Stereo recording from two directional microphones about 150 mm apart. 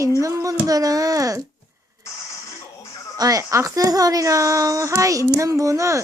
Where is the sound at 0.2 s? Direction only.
20° right (ahead or behind).